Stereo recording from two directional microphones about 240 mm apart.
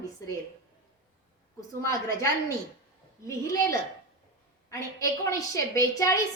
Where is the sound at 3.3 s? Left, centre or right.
Centre.